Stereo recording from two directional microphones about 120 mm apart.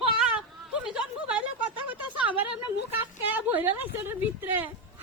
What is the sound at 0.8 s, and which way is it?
Speech, 10° right (ahead or behind).